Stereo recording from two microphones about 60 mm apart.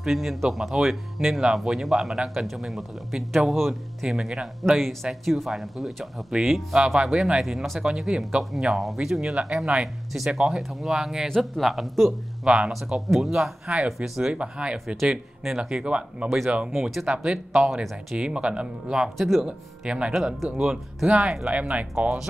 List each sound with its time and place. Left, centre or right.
0.0 s speech: centre
11.2 s speech: centre
12.4 s speech: centre
19.1 s speech: centre
19.4 s speech: centre